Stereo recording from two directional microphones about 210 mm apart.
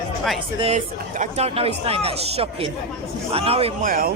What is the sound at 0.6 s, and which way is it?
A man's voice, 35° right (ahead or behind).